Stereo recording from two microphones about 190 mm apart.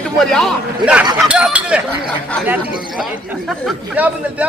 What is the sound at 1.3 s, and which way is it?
Speech, 5° right (ahead or behind).